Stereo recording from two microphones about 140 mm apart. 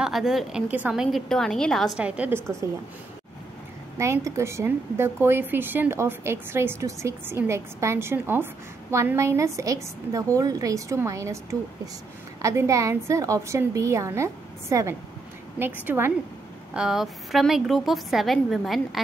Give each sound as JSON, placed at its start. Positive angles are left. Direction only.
{"t": 0.0, "sound": "a woman's voice", "side_deg": 0}
{"t": 4.0, "sound": "a woman's voice", "side_deg": -20}
{"t": 12.4, "sound": "a woman's voice", "side_deg": -20}
{"t": 16.7, "sound": "a woman's voice", "side_deg": -5}